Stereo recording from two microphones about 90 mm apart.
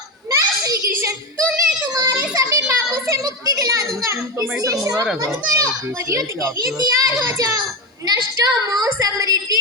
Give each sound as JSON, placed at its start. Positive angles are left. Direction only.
{"t": 0.3, "sound": "a sound", "side_deg": -35}
{"t": 4.6, "sound": "a child's voice", "side_deg": -40}
{"t": 8.0, "sound": "a woman's voice", "side_deg": -45}